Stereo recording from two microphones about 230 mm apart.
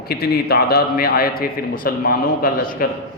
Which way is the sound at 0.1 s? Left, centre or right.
Left.